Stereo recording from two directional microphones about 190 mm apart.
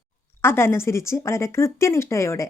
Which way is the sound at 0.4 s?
10° left (ahead or behind).